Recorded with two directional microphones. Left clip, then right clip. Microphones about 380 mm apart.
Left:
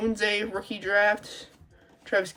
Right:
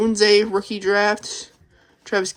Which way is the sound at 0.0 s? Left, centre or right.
Centre.